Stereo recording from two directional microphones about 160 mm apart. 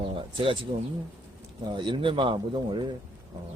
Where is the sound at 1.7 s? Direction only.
30° right (ahead or behind).